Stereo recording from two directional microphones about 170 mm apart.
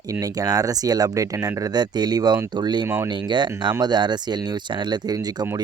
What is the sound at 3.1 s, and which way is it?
Speech, 25° right (ahead or behind).